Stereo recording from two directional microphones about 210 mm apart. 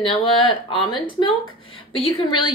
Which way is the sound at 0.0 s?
25° left (ahead or behind).